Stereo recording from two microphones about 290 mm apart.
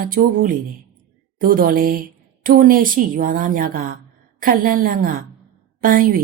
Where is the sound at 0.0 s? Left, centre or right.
Right.